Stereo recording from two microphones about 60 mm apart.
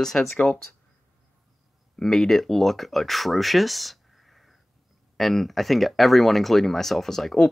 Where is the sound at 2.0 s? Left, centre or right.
Centre.